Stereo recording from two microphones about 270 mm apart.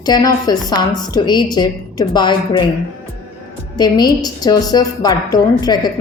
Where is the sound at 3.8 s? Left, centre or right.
Centre.